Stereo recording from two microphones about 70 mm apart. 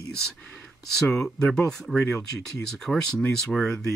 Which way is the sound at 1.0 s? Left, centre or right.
Centre.